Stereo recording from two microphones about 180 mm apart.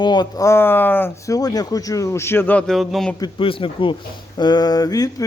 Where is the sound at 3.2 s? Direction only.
30° left (ahead or behind).